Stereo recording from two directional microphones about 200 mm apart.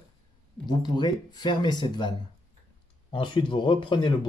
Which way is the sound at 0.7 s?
20° left (ahead or behind).